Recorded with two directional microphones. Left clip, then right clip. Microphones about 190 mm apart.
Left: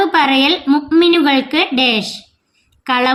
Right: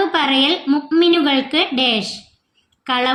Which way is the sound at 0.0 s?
35° left (ahead or behind).